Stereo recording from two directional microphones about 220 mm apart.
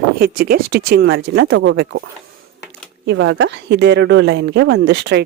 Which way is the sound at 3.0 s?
55° right (ahead or behind).